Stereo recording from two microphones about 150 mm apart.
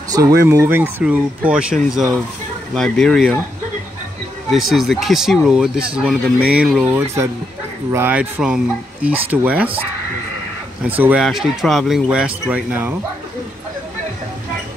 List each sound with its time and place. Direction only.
0.1 s speech: 20° right (ahead or behind); by 3.3 s 5° left (ahead or behind)
4.5 s speech: centre (ahead or behind)
10.8 s speech: 10° right (ahead or behind)
11.2 s speech: centre (ahead or behind)